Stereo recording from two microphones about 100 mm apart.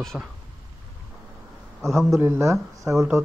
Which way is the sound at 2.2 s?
25° right (ahead or behind).